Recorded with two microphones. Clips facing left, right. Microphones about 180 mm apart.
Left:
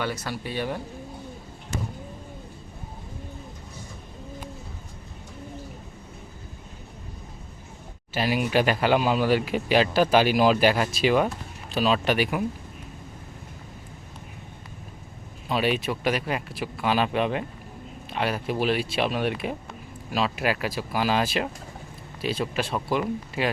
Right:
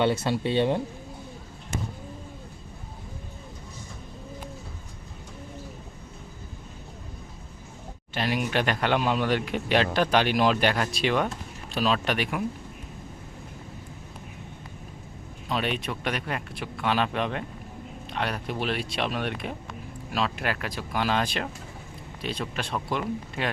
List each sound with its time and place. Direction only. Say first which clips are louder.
0.0 s speech: right 6 dB; 25° right (ahead or behind)
8.1 s speech: left 3 dB; 5° left (ahead or behind)
15.4 s speech: left 4 dB; 5° left (ahead or behind)